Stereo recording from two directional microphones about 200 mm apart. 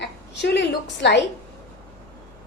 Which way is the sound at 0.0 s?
60° left (ahead or behind).